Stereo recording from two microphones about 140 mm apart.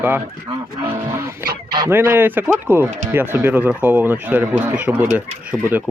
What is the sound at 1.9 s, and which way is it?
Speech, 15° right (ahead or behind).